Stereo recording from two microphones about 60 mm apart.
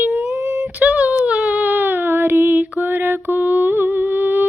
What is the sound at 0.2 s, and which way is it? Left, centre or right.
Female singing, right.